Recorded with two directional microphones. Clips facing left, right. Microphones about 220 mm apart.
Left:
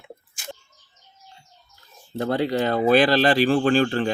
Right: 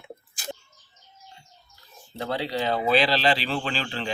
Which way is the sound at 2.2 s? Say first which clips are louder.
Left 6 dB; 50° left (ahead or behind).